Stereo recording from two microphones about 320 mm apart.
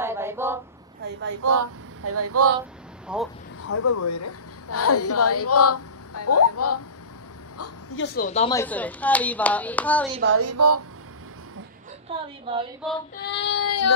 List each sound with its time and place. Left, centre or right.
0.0 s a sound: centre
1.3 s speech: right
3.1 s speech: centre
3.6 s a woman's voice: left
8.0 s speech: left
8.5 s speech: centre
10.2 s speech: right
12.1 s a woman's voice: centre
13.2 s child singing: left
13.7 s a woman's voice: left